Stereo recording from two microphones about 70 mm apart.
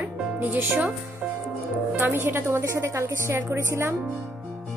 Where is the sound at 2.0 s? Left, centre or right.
Right.